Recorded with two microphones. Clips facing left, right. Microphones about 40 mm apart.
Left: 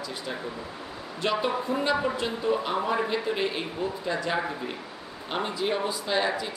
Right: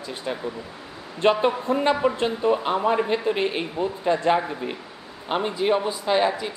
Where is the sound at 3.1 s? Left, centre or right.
Right.